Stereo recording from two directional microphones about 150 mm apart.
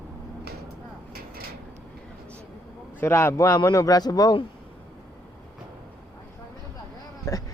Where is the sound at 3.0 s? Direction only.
15° left (ahead or behind).